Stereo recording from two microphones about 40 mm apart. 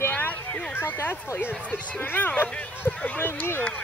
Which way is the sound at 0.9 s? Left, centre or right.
Left.